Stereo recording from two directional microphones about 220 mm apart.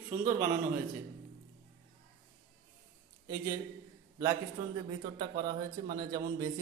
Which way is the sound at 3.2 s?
10° right (ahead or behind).